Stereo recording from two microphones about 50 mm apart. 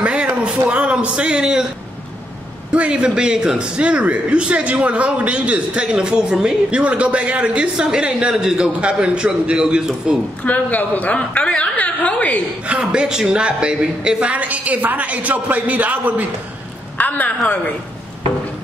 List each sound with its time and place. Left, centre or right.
0.0 s a sound: right
0.7 s a man's voice: right
2.7 s a man's voice: right
10.4 s a woman's voice: left
12.6 s a man's voice: centre
17.0 s a sound: left
17.4 s a woman's voice: left